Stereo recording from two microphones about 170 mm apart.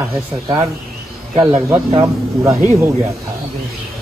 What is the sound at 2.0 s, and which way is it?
Speech, 15° right (ahead or behind).